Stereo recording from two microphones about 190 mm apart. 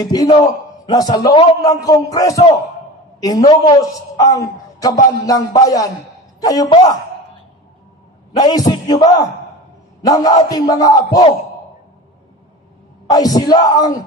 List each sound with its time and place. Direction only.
0.0 s a man's voice: 20° left (ahead or behind)
8.4 s a man's voice: 20° left (ahead or behind)
13.1 s a man's voice: 20° left (ahead or behind)